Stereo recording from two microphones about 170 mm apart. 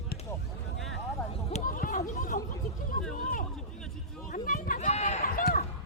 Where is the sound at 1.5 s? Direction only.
40° left (ahead or behind).